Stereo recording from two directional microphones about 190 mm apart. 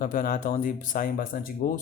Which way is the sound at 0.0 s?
50° left (ahead or behind).